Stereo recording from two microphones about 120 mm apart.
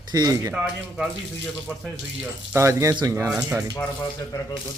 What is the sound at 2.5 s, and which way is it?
Speech, 25° right (ahead or behind).